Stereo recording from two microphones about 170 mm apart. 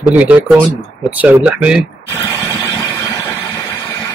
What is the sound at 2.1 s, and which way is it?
Vehicle, 15° left (ahead or behind).